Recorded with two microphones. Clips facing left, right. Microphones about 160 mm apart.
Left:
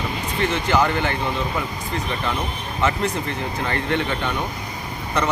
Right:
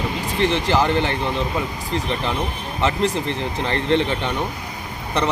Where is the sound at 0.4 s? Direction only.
30° right (ahead or behind).